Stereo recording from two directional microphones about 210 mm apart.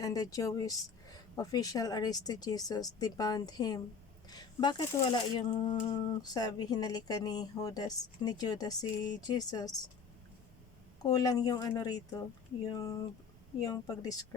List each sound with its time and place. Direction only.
0.0 s speech: 15° left (ahead or behind)
11.0 s speech: 20° left (ahead or behind)
13.7 s speech: 15° left (ahead or behind)